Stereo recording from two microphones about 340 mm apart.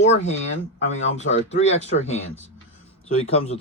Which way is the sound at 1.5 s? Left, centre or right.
Centre.